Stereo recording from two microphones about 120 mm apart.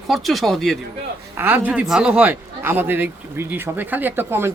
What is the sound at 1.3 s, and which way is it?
Speech, 15° right (ahead or behind).